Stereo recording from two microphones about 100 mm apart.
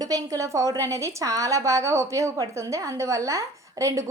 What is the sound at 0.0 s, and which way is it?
A woman's voice, 35° right (ahead or behind).